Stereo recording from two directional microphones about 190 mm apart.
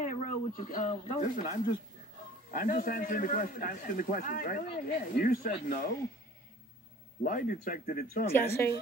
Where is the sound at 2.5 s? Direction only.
50° left (ahead or behind).